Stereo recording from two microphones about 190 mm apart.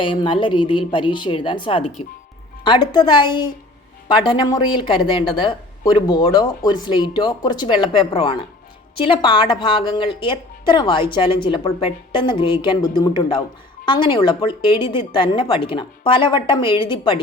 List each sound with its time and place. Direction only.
0.0 s a woman's voice: 25° left (ahead or behind)